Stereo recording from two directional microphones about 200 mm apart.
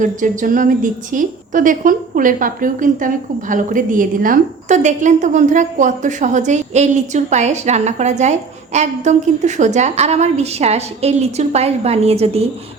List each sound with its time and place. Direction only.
0.0 s a woman's voice: 40° right (ahead or behind)